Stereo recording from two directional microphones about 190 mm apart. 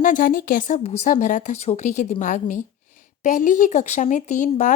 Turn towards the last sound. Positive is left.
turn(degrees=40)  # may be behind; listen again after turning